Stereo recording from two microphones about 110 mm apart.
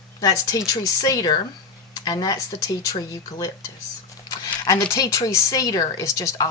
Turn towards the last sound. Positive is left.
turn(degrees=30)  # may be behind; listen again after turning